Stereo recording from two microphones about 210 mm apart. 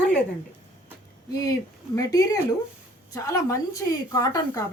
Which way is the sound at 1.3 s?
15° left (ahead or behind).